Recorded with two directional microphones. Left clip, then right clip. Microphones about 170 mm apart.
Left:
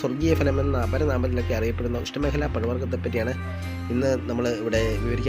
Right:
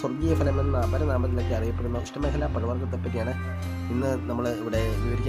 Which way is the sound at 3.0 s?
Centre (ahead or behind).